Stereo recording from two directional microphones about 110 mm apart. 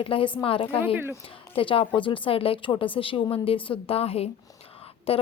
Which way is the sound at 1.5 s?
55° left (ahead or behind).